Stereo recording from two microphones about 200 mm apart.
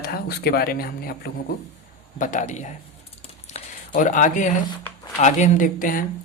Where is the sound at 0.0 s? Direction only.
50° left (ahead or behind).